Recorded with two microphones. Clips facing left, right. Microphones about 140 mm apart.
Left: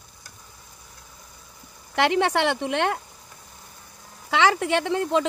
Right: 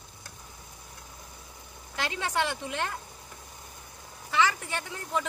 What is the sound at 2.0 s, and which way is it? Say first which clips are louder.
Speech: left 9 dB; 70° left (ahead or behind).